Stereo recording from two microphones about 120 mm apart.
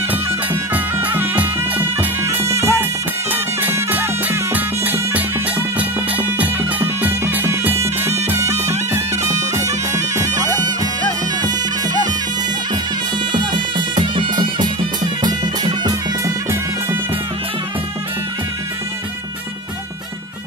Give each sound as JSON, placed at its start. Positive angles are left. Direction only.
{"t": 0.7, "sound": "music", "side_deg": -15}
{"t": 9.9, "sound": "bagpipes", "side_deg": -25}
{"t": 13.3, "sound": "music", "side_deg": -40}